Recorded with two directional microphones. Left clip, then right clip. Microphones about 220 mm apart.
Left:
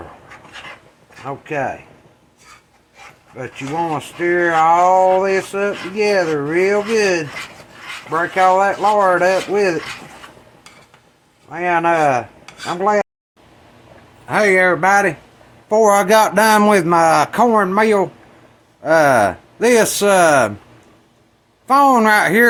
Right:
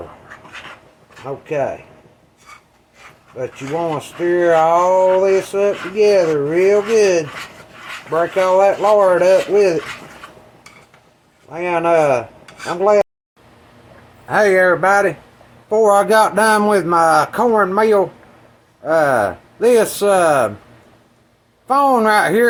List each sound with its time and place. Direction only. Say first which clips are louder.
1.2 s a man's voice: right 2 dB; 30° left (ahead or behind)
3.3 s speech: even; 30° left (ahead or behind)
8.4 s a man's voice: even; 30° left (ahead or behind)
11.5 s a man's voice: right 1 dB; 30° left (ahead or behind)
14.3 s a man's voice: right 1 dB; 30° left (ahead or behind)
21.7 s a man's voice: left 2 dB; 30° left (ahead or behind)